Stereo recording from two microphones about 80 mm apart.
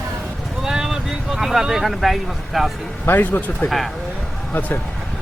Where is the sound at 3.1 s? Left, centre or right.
Left.